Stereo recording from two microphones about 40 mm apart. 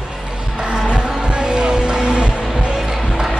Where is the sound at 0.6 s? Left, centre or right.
Right.